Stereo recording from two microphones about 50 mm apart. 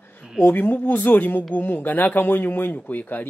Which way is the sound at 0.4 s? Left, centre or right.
Left.